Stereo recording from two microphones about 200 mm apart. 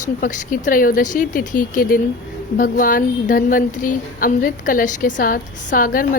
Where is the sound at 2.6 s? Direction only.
45° left (ahead or behind).